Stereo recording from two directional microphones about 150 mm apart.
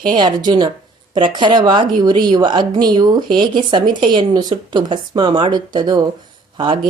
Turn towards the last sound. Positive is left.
turn(degrees=-35)  # may be behind; listen again after turning